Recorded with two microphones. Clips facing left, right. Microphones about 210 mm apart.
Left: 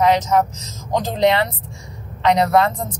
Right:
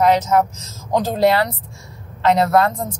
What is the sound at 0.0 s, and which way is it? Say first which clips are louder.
Speech: right 1 dB; 10° right (ahead or behind).